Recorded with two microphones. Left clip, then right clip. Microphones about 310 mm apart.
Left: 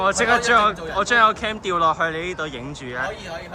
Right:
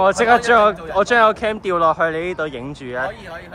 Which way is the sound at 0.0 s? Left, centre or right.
Centre.